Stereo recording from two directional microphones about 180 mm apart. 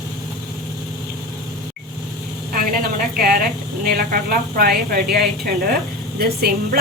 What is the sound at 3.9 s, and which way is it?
Speech, 60° right (ahead or behind).